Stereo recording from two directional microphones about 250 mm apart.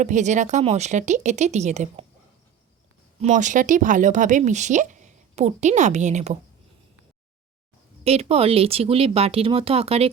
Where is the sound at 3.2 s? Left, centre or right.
Right.